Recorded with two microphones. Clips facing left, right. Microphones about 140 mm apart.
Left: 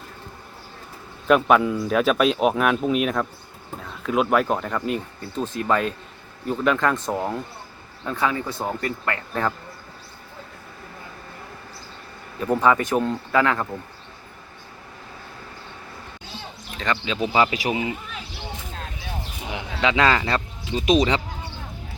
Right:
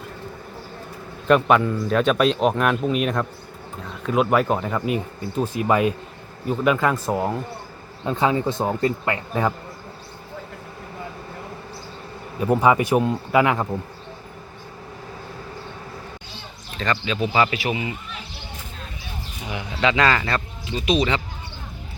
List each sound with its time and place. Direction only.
1.3 s speech: centre (ahead or behind)
8.0 s a man's voice: 20° right (ahead or behind)
12.4 s speech: 10° right (ahead or behind)
16.7 s speech: 15° left (ahead or behind)
17.6 s speech: 35° left (ahead or behind)
19.5 s speech: 15° left (ahead or behind)